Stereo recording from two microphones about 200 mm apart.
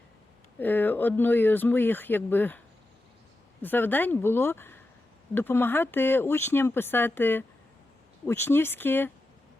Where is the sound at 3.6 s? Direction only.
10° left (ahead or behind).